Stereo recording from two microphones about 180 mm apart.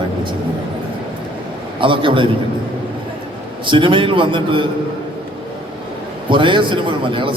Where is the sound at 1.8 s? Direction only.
30° right (ahead or behind).